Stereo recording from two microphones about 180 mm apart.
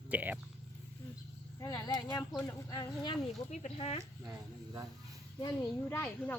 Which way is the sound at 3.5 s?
35° left (ahead or behind).